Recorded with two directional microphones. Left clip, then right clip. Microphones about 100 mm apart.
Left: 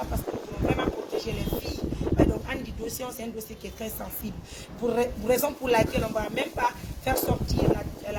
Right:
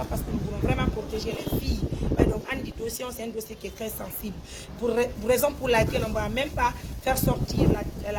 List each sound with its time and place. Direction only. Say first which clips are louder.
0.8 s vehicle: left 1 dB; 45° right (ahead or behind)
4.9 s speech: right 1 dB; 40° right (ahead or behind)